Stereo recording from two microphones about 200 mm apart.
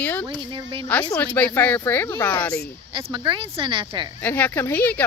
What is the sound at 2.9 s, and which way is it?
Speech, 25° right (ahead or behind).